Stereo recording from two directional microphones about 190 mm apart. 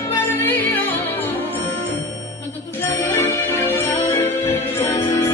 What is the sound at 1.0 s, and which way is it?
Music, 10° left (ahead or behind).